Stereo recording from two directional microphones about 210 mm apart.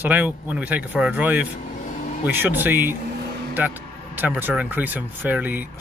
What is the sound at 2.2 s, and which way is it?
Speech, 10° right (ahead or behind).